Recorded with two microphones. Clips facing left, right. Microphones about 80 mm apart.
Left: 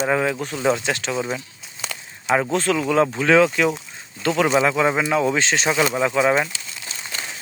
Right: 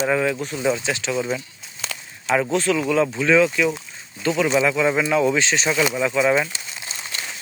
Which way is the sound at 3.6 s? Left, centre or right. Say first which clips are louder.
Left 1 dB; left.